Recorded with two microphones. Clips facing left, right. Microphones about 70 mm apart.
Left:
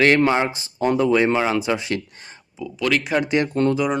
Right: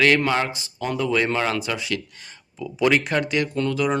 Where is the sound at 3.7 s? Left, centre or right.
Centre.